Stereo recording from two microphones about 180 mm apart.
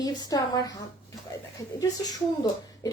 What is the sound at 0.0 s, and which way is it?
Speech, 20° left (ahead or behind).